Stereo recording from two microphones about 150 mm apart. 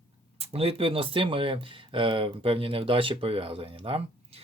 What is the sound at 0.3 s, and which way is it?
Speech, 40° right (ahead or behind).